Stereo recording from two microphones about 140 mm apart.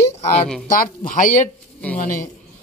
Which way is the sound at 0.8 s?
75° left (ahead or behind).